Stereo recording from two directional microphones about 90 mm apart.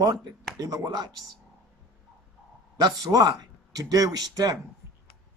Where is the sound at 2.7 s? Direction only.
45° right (ahead or behind).